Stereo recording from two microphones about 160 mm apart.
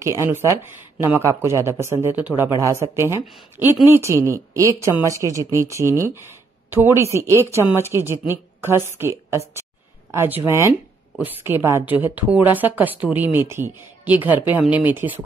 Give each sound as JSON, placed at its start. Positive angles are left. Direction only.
{"t": 0.0, "sound": "a woman's voice", "side_deg": -20}
{"t": 10.1, "sound": "a woman's voice", "side_deg": -15}